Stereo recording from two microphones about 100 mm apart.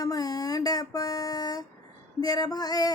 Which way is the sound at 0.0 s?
40° left (ahead or behind).